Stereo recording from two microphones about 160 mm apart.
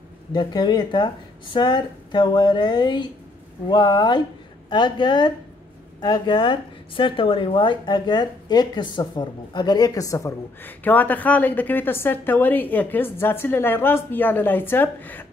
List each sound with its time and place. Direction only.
0.3 s speech: 25° left (ahead or behind); by 15.2 s 10° left (ahead or behind)